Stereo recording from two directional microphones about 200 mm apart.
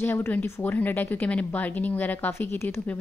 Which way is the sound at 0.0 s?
10° left (ahead or behind).